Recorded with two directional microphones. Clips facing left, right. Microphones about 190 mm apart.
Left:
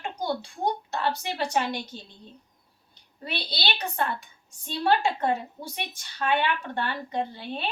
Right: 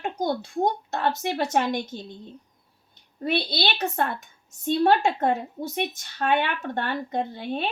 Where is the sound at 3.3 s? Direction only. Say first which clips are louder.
Right 7 dB; 50° right (ahead or behind).